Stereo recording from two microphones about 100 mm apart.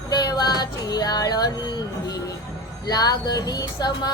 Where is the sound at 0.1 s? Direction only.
40° left (ahead or behind).